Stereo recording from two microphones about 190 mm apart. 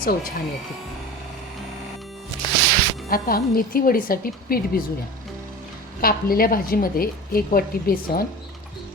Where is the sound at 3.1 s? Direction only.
50° left (ahead or behind).